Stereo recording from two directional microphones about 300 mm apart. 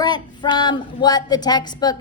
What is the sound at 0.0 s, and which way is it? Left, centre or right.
Speech, centre.